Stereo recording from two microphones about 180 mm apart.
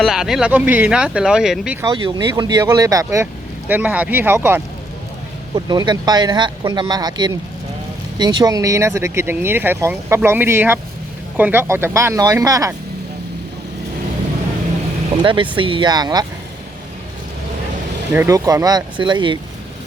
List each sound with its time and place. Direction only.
0.0 s speech: 5° right (ahead or behind)
2.0 s speech: 25° right (ahead or behind)
15.2 s speech: 25° right (ahead or behind)
18.1 s speech: 15° right (ahead or behind)